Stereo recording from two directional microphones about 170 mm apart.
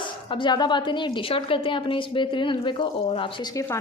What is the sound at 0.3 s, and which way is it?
A woman's voice, 30° left (ahead or behind).